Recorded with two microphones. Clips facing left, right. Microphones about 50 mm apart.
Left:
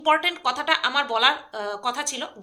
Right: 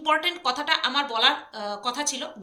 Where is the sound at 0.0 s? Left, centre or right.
Centre.